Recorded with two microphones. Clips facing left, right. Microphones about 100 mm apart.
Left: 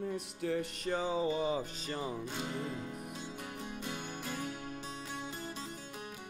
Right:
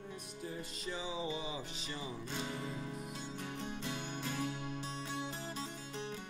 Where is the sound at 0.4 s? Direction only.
70° left (ahead or behind); by 2.7 s 55° left (ahead or behind).